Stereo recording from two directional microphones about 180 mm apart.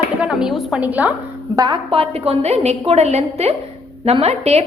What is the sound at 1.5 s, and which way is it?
A woman's voice, 25° right (ahead or behind).